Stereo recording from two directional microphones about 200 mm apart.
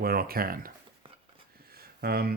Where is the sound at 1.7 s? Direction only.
50° right (ahead or behind).